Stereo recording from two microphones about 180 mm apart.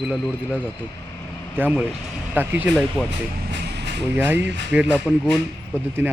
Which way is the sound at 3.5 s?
70° right (ahead or behind).